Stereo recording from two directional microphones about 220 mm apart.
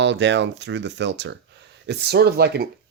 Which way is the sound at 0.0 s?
55° right (ahead or behind).